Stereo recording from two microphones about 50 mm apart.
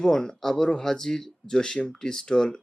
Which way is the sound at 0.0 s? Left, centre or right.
Centre.